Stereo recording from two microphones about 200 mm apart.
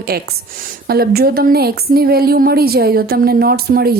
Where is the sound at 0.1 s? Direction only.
50° right (ahead or behind).